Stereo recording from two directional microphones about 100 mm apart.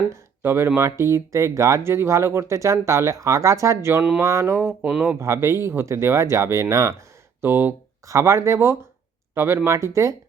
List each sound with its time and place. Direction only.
0.1 s speech: 25° right (ahead or behind)